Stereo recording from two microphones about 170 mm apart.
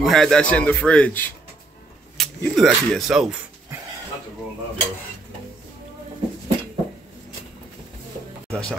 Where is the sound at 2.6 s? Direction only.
Centre (ahead or behind).